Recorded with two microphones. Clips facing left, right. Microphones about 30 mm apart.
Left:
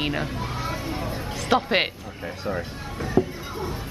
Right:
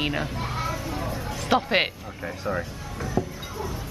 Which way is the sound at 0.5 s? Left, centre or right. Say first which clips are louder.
Right 1 dB; left.